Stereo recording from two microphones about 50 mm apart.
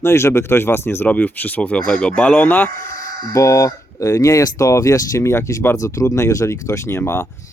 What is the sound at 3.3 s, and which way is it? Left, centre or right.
Speech, left.